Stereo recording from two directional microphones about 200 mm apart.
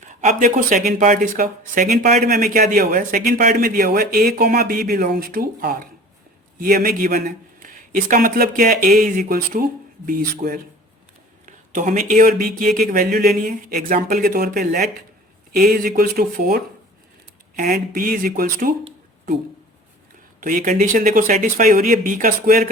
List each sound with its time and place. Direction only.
0.0 s speech: 40° right (ahead or behind)
18.9 s a sound: 40° right (ahead or behind)
20.4 s speech: 40° right (ahead or behind)